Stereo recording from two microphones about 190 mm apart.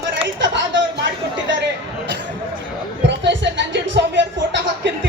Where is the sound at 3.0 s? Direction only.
70° right (ahead or behind).